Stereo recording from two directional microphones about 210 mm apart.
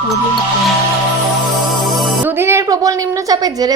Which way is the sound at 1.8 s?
Centre (ahead or behind).